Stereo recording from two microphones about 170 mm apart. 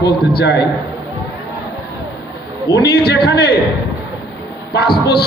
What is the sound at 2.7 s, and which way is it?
Speech, 70° left (ahead or behind).